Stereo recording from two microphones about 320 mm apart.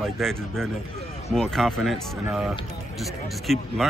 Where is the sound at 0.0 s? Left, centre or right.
Centre.